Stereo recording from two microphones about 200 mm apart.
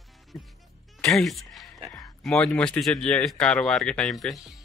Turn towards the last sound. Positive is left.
turn(degrees=0)  # may be behind; listen again after turning